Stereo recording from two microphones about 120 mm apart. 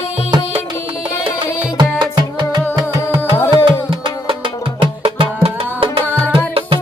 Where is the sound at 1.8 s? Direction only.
40° right (ahead or behind).